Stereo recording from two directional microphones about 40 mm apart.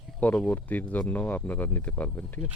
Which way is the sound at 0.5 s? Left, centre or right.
Left.